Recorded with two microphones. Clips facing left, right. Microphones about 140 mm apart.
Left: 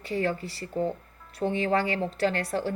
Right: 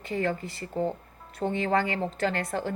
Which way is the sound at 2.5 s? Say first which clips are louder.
Left 2 dB; 35° left (ahead or behind).